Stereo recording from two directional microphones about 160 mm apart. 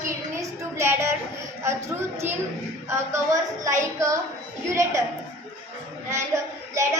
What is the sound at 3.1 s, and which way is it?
A woman's voice, 20° right (ahead or behind).